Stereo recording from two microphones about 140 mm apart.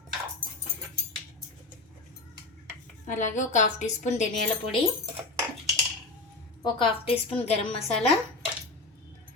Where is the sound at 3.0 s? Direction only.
60° left (ahead or behind).